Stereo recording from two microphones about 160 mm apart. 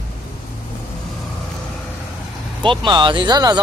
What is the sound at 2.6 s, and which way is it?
Speech, 30° right (ahead or behind).